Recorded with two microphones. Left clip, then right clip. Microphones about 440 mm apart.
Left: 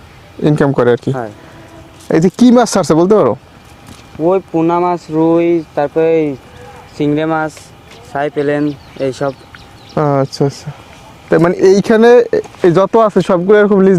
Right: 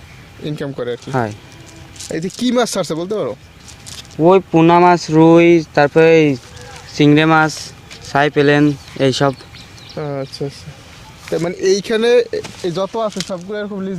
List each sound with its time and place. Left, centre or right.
0.4 s speech: left
2.0 s speech: left
4.2 s speech: right
9.9 s speech: left
12.7 s speech: left